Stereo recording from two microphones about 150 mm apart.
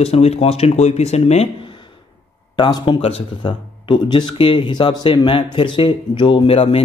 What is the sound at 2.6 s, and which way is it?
Speech, 30° left (ahead or behind).